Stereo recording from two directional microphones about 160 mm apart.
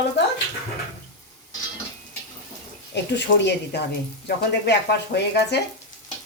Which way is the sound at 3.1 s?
90° left.